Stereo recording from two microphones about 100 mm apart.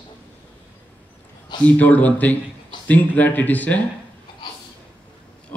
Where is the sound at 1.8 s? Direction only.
15° left (ahead or behind).